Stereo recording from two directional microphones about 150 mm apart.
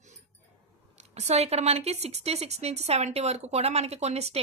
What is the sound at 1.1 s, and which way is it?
A woman's voice, 45° right (ahead or behind).